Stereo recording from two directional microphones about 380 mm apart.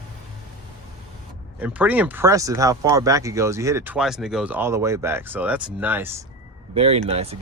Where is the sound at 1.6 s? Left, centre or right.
Centre.